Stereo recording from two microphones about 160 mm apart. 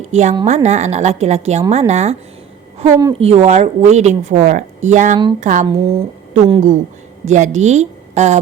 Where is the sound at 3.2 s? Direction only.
40° right (ahead or behind).